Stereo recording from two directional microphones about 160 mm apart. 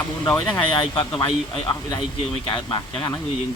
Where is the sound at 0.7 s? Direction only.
30° left (ahead or behind).